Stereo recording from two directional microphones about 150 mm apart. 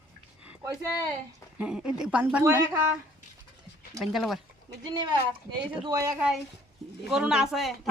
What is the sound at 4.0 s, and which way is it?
Speech, centre (ahead or behind).